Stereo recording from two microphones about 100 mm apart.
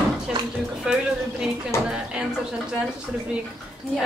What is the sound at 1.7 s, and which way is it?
Speech, 25° left (ahead or behind).